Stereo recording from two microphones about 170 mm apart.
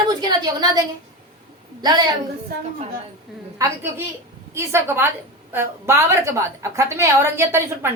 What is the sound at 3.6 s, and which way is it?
A woman's voice, 20° right (ahead or behind).